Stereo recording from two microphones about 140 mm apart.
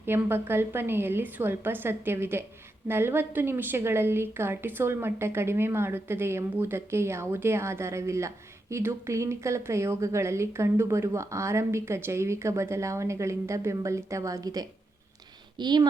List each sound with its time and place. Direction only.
0.0 s a woman's voice: 15° right (ahead or behind); by 15.9 s 30° right (ahead or behind)